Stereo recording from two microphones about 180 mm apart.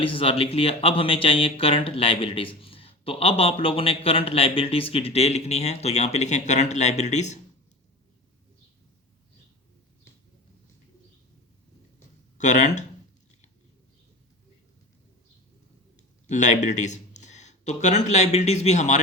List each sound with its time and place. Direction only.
0.0 s speech: 30° left (ahead or behind)
12.4 s speech: 40° left (ahead or behind)
16.3 s speech: 40° left (ahead or behind)